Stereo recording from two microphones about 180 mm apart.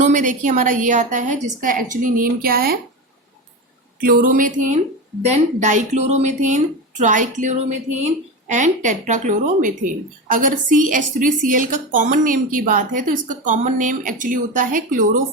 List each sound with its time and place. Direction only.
0.0 s a woman's voice: 45° right (ahead or behind)
4.0 s a woman's voice: 50° right (ahead or behind)